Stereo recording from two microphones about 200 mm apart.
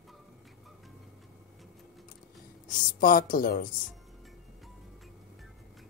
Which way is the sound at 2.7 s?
45° left (ahead or behind).